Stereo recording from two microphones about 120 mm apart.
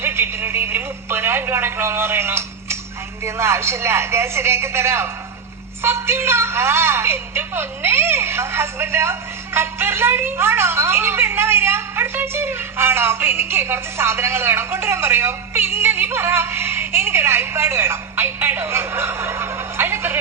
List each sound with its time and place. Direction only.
0.0 s a woman's voice: 20° right (ahead or behind)